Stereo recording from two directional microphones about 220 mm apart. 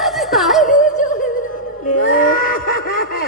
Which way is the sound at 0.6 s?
35° left (ahead or behind).